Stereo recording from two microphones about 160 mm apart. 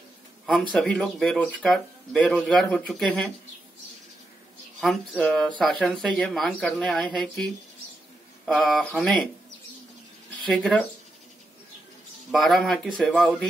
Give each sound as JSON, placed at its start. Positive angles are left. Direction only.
{"t": 0.5, "sound": "speech", "side_deg": 0}
{"t": 4.7, "sound": "speech", "side_deg": 0}
{"t": 8.5, "sound": "speech", "side_deg": 0}
{"t": 10.4, "sound": "speech", "side_deg": 5}
{"t": 12.3, "sound": "speech", "side_deg": 0}